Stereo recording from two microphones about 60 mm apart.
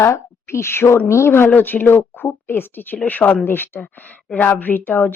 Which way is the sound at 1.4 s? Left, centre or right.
Left.